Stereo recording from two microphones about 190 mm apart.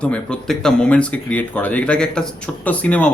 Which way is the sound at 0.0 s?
5° left (ahead or behind).